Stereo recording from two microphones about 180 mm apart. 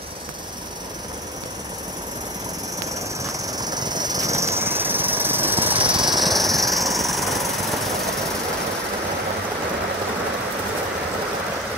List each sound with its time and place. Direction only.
3.2 s vehicle: 20° right (ahead or behind)
5.8 s jackhammer: 25° right (ahead or behind)
6.1 s vehicle: centre (ahead or behind)